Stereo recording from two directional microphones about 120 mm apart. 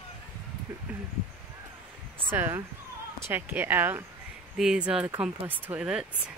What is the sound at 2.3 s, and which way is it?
Speech, 20° right (ahead or behind).